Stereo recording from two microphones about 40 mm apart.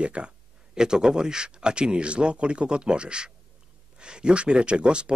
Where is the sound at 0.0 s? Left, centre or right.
Right.